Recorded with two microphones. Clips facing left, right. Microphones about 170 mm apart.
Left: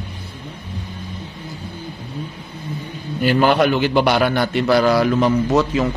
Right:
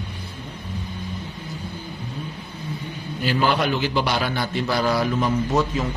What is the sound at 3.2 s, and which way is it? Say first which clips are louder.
A man's voice: left 6 dB; 60° left (ahead or behind).